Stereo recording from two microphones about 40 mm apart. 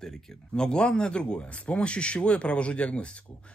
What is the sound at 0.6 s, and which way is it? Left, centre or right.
Speech, left.